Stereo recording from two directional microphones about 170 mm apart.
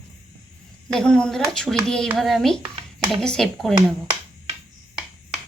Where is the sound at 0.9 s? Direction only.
5° left (ahead or behind).